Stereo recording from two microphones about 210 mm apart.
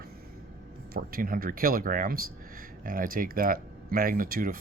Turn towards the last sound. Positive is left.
turn(degrees=-45)  # may be behind; listen again after turning